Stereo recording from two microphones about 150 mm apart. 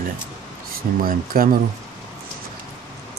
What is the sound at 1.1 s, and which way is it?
Speech, 70° right (ahead or behind).